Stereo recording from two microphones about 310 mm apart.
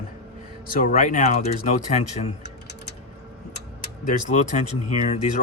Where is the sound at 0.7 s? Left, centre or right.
Left.